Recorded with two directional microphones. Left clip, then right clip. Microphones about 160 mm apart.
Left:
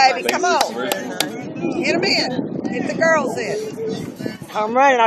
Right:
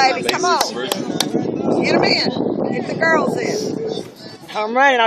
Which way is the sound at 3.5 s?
Centre (ahead or behind).